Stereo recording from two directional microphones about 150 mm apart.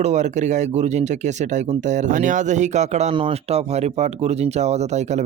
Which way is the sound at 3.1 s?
40° right (ahead or behind).